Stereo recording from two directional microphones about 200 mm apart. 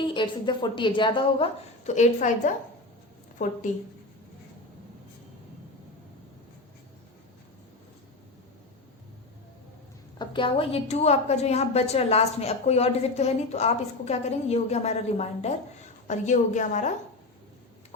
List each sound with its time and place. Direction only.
0.0 s a woman's voice: 25° left (ahead or behind); by 2.5 s 40° left (ahead or behind)
10.2 s a woman's voice: 25° left (ahead or behind)